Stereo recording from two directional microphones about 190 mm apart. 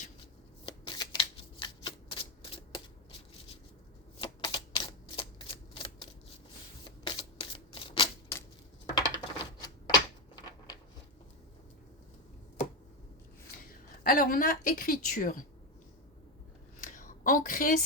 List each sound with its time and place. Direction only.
0.6 s shuffling cards: 25° left (ahead or behind)
4.2 s typewriter: 25° left (ahead or behind)
6.8 s shuffling cards: 25° left (ahead or behind)
9.0 s typing: 20° left (ahead or behind)
14.0 s a woman's voice: 50° left (ahead or behind)
16.8 s a sound: 45° left (ahead or behind)